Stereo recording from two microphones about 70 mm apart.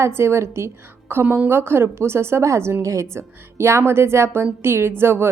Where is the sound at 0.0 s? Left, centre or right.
Right.